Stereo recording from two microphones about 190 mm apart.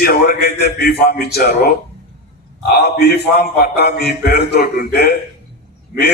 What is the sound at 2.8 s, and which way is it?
A man's voice, 60° left (ahead or behind).